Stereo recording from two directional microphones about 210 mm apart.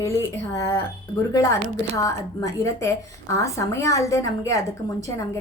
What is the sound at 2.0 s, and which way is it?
A woman's voice, 15° left (ahead or behind).